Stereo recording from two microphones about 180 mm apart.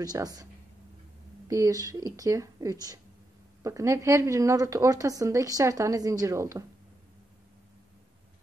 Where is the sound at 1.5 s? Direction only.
20° right (ahead or behind).